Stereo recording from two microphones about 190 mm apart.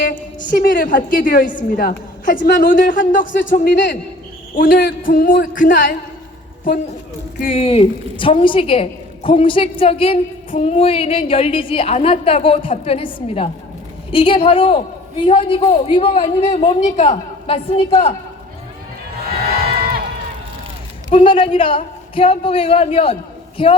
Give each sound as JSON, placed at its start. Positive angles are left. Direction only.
{"t": 0.0, "sound": "a sound", "side_deg": 50}
{"t": 1.2, "sound": "a woman's voice", "side_deg": 45}
{"t": 7.5, "sound": "a woman's voice", "side_deg": 30}
{"t": 16.8, "sound": "a woman's voice", "side_deg": 40}
{"t": 21.1, "sound": "a woman's voice", "side_deg": 30}